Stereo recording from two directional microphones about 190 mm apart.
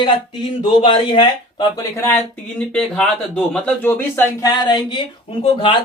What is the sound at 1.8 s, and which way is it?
Speech, 15° left (ahead or behind).